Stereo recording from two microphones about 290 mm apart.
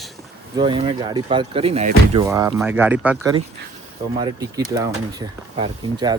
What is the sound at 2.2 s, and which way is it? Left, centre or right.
Speech, centre.